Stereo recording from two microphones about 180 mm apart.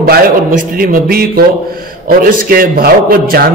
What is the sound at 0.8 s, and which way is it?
A man's voice, 55° right (ahead or behind).